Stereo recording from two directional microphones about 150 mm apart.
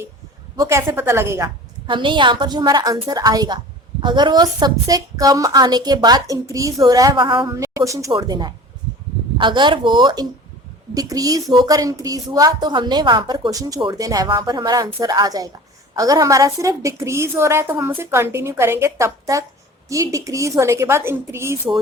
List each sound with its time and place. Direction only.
0.5 s a woman's voice: 20° right (ahead or behind)
1.9 s a woman's voice: 35° right (ahead or behind)
7.4 s a woman's voice: 20° right (ahead or behind)